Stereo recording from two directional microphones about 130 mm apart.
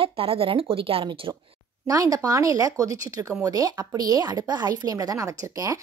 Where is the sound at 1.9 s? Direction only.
25° right (ahead or behind).